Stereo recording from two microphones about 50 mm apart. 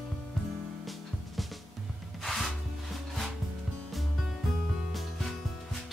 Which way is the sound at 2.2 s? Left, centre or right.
Centre.